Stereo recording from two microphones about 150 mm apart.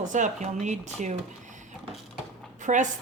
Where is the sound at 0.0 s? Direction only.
55° right (ahead or behind).